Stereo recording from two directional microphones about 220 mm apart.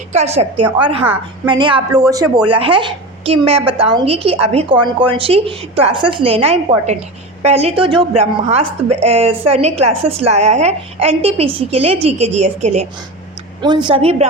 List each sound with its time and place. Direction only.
0.1 s a woman's voice: 30° right (ahead or behind)